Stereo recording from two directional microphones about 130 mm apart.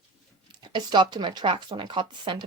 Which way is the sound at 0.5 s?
35° right (ahead or behind).